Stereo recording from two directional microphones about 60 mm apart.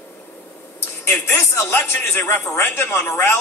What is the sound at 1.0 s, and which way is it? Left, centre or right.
A man's voice, left.